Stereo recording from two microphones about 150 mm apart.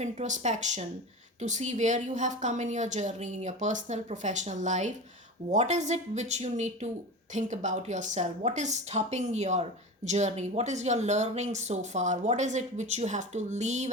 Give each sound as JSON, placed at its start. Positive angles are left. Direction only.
{"t": 0.0, "sound": "a woman's voice", "side_deg": -50}